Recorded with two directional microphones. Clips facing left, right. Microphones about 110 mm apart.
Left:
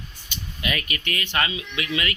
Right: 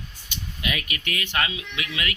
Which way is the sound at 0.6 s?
5° right (ahead or behind).